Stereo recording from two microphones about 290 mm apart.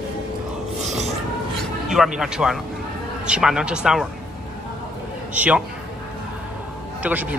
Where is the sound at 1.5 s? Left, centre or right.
Centre.